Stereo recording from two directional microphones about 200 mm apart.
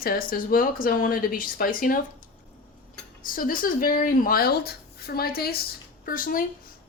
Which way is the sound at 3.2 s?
45° left (ahead or behind).